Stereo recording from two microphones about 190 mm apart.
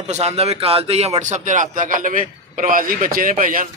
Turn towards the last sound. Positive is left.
turn(degrees=-45)  # may be behind; listen again after turning